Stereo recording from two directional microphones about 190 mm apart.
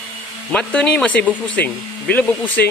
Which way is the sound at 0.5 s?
5° left (ahead or behind).